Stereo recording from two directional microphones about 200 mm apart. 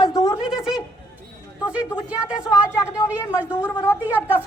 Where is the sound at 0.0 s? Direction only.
20° left (ahead or behind).